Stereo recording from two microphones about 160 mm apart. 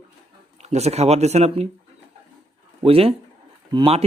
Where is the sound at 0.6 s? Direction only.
45° right (ahead or behind).